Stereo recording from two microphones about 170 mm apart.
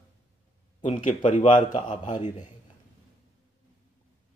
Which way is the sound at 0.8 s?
45° left (ahead or behind).